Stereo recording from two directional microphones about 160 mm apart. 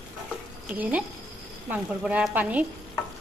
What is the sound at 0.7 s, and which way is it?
Speech, 10° right (ahead or behind).